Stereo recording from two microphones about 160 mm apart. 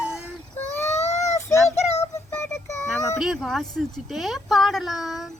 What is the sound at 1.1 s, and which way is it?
Child singing, 45° left (ahead or behind).